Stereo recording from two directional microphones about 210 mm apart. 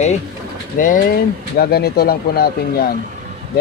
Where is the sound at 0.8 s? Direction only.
40° left (ahead or behind).